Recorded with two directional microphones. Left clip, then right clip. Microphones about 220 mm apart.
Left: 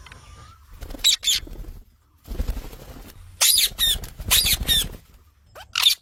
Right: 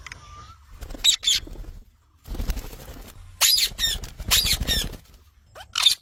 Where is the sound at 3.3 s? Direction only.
15° left (ahead or behind).